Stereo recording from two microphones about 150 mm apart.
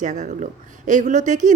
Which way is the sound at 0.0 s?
55° right (ahead or behind).